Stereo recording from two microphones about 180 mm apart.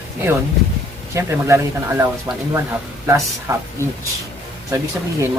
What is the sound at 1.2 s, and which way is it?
Speech, 15° right (ahead or behind).